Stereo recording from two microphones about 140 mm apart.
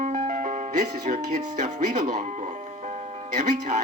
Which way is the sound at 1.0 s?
55° right (ahead or behind).